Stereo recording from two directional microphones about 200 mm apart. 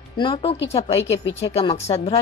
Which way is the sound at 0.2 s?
25° left (ahead or behind).